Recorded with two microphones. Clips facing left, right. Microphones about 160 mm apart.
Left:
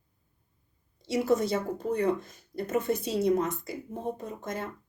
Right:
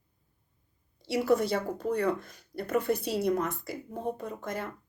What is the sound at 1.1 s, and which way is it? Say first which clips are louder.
Speech: even; 20° left (ahead or behind).